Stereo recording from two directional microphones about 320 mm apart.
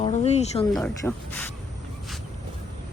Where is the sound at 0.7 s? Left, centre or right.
Centre.